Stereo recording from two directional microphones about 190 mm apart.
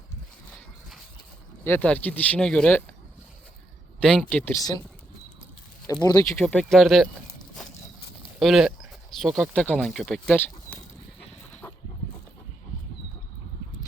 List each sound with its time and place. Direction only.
1.6 s speech: 10° left (ahead or behind)
4.0 s speech: 5° left (ahead or behind)
5.9 s speech: 20° left (ahead or behind)
6.4 s speech: 5° left (ahead or behind)
8.4 s speech: centre (ahead or behind)
11.6 s dog: 10° left (ahead or behind)